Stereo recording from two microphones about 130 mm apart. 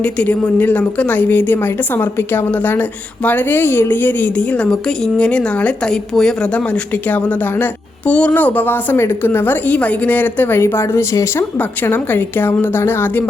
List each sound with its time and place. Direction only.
0.0 s a woman's voice: 10° left (ahead or behind)